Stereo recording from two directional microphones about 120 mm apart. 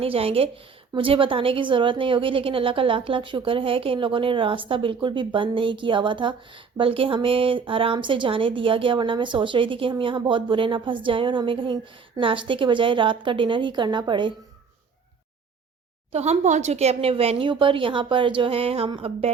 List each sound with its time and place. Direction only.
0.0 s a woman's voice: 55° right (ahead or behind)
16.1 s a woman's voice: 65° right (ahead or behind)